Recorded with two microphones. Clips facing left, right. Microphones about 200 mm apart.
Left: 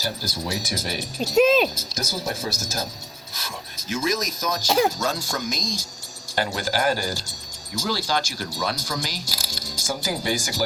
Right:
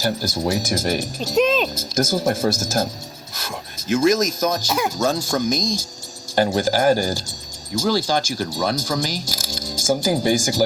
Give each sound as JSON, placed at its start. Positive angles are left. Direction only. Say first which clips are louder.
{"t": 0.0, "sound": "speech", "louder": "right 8 dB", "side_deg": -50}
{"t": 1.4, "sound": "speech", "louder": "left 1 dB", "side_deg": 5}
{"t": 1.7, "sound": "speech", "louder": "right 10 dB", "side_deg": -50}